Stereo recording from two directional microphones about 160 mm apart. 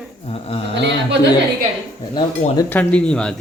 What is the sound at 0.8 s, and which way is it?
Speech, 90° right.